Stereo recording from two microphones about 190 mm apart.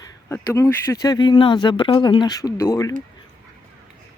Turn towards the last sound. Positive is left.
turn(degrees=15)  # may be behind; listen again after turning